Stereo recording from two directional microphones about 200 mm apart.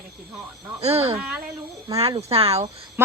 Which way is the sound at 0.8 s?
30° right (ahead or behind).